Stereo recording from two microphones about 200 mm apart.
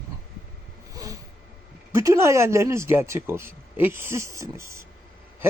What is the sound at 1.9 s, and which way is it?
A man's voice, 15° right (ahead or behind).